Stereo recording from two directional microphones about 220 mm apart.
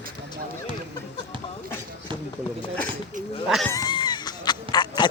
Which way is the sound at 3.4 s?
Centre (ahead or behind).